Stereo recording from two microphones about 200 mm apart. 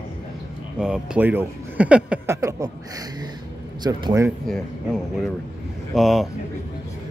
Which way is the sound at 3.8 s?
15° right (ahead or behind).